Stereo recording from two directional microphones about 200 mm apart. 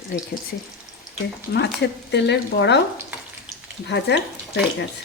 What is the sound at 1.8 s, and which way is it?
Speech, 60° left (ahead or behind).